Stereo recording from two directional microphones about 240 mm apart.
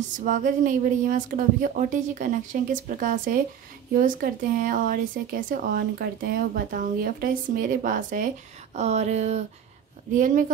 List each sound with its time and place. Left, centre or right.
0.2 s speech: right
8.7 s a sound: right
10.1 s speech: right